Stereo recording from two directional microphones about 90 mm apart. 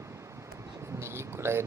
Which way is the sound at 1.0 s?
30° right (ahead or behind).